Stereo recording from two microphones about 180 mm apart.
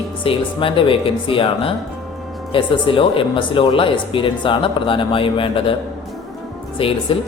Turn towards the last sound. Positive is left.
turn(degrees=30)  # may be behind; listen again after turning